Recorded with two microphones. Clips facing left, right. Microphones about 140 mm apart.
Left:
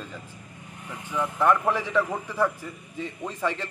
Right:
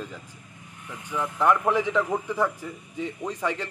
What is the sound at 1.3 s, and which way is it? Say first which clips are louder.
A man's voice: right 1 dB; 15° right (ahead or behind).